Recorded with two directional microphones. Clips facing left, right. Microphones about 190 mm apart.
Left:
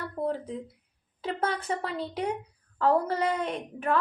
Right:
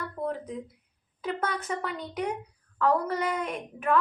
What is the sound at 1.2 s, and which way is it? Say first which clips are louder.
A woman's voice: left 1 dB; 30° left (ahead or behind).